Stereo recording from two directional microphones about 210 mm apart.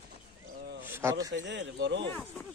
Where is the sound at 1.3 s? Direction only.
60° right (ahead or behind).